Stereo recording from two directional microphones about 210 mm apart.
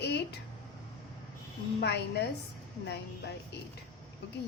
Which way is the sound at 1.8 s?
50° left (ahead or behind).